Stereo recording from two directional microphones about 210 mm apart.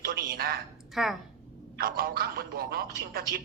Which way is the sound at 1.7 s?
45° right (ahead or behind).